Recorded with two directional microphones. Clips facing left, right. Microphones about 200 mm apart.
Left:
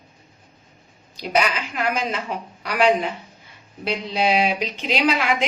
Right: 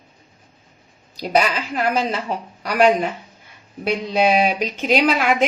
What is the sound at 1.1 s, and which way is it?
A woman's voice, 35° right (ahead or behind).